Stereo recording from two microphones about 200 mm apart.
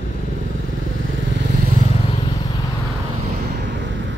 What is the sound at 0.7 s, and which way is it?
Vehicle, 75° right (ahead or behind).